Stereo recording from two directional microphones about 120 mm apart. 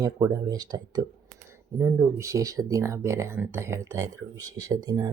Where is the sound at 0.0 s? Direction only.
30° right (ahead or behind).